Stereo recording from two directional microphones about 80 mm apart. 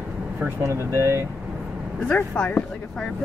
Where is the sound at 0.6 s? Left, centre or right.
Right.